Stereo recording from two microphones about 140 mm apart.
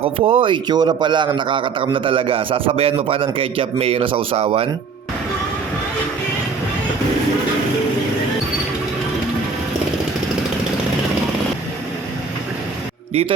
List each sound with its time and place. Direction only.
0.0 s a man's voice: 40° right (ahead or behind)